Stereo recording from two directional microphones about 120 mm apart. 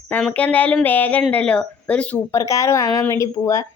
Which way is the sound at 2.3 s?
25° left (ahead or behind).